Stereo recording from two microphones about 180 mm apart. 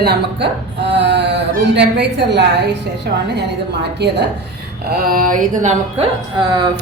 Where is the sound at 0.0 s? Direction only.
65° right (ahead or behind).